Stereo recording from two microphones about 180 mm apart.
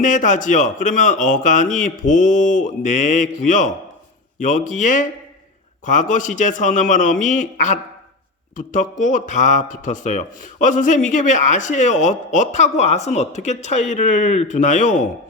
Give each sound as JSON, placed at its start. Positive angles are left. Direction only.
{"t": 0.0, "sound": "speech", "side_deg": 45}